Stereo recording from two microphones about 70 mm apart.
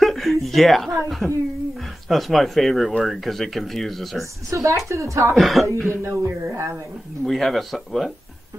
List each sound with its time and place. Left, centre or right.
0.0 s a sound: centre
1.2 s speech: centre
4.5 s a woman's voice: right
5.3 s speech: centre
5.8 s speech: right
7.2 s speech: centre